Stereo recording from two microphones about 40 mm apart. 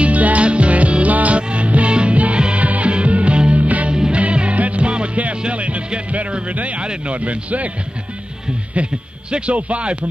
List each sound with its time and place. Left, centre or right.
0.0 s music: right
3.9 s music: right
4.2 s music: right
6.5 s a man's voice: right
8.8 s a man's voice: right